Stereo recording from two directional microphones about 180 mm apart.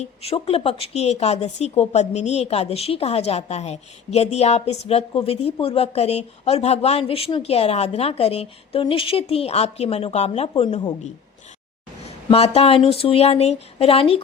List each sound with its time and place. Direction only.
0.0 s a woman's voice: 35° left (ahead or behind)